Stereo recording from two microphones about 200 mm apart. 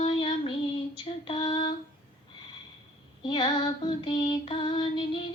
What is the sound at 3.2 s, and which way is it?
Female singing, 20° left (ahead or behind).